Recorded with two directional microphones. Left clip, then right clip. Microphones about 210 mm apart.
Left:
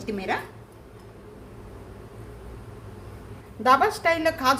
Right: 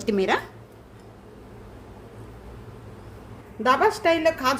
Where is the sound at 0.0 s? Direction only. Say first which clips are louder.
Right 6 dB; 50° right (ahead or behind).